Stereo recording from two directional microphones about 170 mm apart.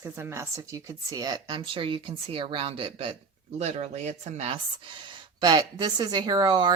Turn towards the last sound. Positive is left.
turn(degrees=-25)  # may be behind; listen again after turning